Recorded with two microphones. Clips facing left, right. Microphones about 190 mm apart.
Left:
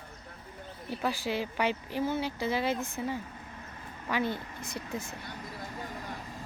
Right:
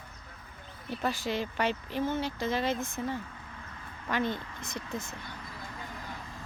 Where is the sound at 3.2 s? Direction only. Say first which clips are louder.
Left 1 dB; 25° left (ahead or behind).